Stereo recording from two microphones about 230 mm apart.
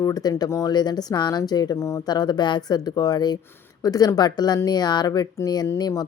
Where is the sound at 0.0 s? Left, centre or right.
Centre.